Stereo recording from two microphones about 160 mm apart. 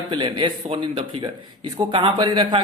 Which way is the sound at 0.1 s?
30° right (ahead or behind).